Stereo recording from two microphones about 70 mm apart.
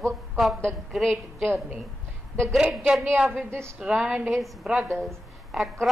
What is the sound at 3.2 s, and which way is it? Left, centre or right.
Speech, right.